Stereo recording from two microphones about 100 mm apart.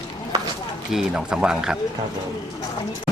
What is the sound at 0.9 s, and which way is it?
Speech, 5° right (ahead or behind).